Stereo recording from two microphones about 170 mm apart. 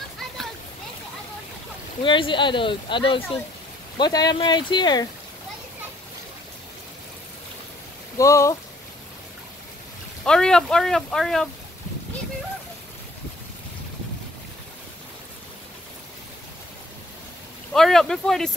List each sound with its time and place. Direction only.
2.0 s speech: 30° left (ahead or behind)
8.2 s speech: 20° left (ahead or behind)
10.2 s speech: 5° left (ahead or behind)
17.7 s speech: centre (ahead or behind)